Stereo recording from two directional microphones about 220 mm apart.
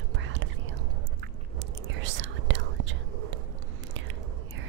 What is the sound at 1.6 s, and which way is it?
Whispering, 55° right (ahead or behind).